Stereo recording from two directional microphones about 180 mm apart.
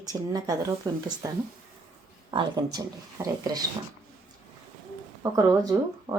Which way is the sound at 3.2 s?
10° right (ahead or behind).